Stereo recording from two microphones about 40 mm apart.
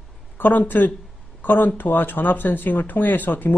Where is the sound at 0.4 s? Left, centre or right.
Left.